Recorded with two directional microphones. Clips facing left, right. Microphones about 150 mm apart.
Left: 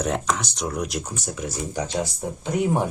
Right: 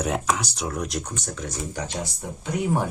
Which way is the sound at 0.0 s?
5° right (ahead or behind).